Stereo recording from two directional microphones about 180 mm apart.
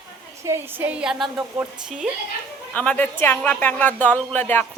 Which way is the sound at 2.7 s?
10° left (ahead or behind).